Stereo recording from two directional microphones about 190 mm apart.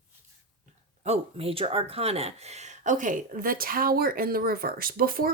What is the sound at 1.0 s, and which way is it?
Speech, 35° right (ahead or behind).